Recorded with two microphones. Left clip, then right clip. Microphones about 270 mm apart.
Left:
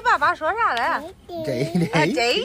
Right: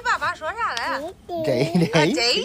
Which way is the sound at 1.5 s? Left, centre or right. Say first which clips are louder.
Right 3 dB; centre.